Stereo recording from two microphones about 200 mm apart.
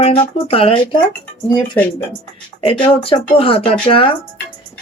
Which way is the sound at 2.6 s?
25° left (ahead or behind).